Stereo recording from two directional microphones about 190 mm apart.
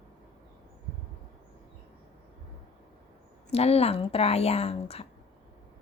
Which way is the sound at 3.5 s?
30° left (ahead or behind).